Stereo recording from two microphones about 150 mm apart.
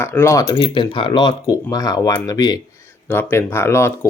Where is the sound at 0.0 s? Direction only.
15° left (ahead or behind).